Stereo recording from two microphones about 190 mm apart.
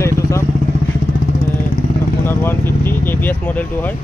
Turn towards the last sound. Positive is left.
turn(degrees=10)  # may be behind; listen again after turning